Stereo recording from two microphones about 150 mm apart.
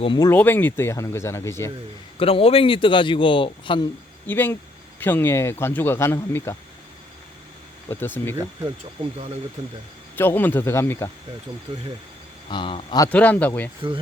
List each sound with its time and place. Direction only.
0.0 s a man's voice: 30° left (ahead or behind)
0.3 s speech: 15° left (ahead or behind)
2.1 s a man's voice: 40° left (ahead or behind)
4.3 s speech: 10° left (ahead or behind)
7.9 s speech: 15° left (ahead or behind)
9.1 s speech: 45° right (ahead or behind)
10.2 s speech: 15° left (ahead or behind)
12.5 s a man's voice: 35° left (ahead or behind)
13.1 s speech: 10° left (ahead or behind)